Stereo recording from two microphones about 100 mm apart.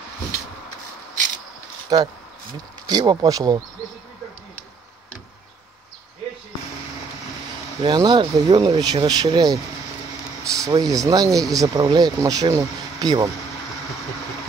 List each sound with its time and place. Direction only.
1.9 s speech: 40° right (ahead or behind)
7.8 s speech: 50° right (ahead or behind)
10.4 s speech: 35° right (ahead or behind)